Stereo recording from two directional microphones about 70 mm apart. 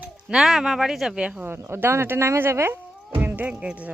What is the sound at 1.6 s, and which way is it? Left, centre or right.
Speech, right.